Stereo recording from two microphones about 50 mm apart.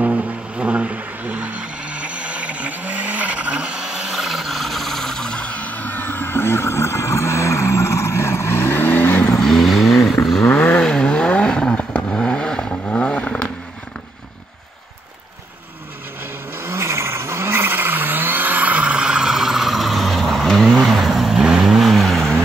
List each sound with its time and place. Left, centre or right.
0.0 s a sound: right; by 5.4 s centre
5.4 s music: left
9.3 s vehicle: centre
10.4 s vehicle: left
10.8 s vehicle: centre
16.6 s vehicle: right; by 21.4 s centre
21.4 s vehicle: centre